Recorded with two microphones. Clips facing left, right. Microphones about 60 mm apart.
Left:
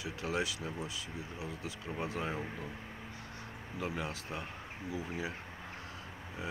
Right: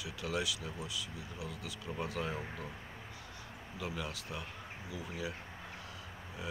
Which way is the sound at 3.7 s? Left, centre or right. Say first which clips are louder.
Left 3 dB; left.